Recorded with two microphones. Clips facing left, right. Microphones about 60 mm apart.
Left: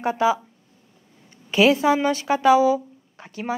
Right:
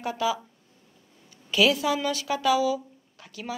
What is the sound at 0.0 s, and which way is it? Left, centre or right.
A woman's voice, left.